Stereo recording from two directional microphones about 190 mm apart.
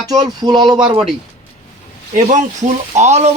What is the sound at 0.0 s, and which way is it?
Speech, 20° right (ahead or behind).